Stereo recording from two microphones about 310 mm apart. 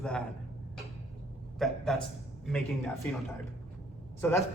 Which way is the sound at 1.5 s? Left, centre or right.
Centre.